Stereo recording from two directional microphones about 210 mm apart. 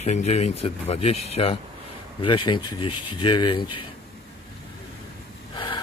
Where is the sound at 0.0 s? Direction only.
30° left (ahead or behind).